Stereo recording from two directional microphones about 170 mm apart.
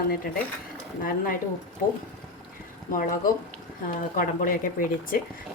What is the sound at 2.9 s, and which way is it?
A woman's voice, 50° left (ahead or behind).